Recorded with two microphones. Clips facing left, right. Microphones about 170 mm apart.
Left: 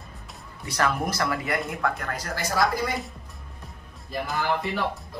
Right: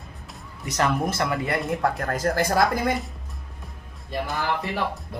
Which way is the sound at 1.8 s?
40° right (ahead or behind).